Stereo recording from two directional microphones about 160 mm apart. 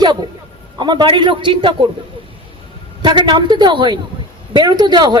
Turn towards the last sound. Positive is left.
turn(degrees=-30)  # may be behind; listen again after turning